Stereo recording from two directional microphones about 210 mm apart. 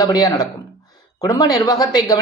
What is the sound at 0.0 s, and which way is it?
Speech, 15° left (ahead or behind).